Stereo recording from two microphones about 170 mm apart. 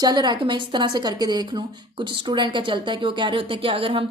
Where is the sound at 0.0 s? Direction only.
25° right (ahead or behind).